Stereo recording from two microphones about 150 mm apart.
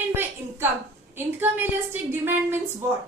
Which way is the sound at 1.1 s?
15° right (ahead or behind).